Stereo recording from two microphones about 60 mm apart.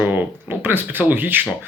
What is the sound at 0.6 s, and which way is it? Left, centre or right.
Speech, right.